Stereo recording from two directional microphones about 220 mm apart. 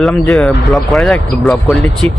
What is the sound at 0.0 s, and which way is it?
Speech, centre (ahead or behind).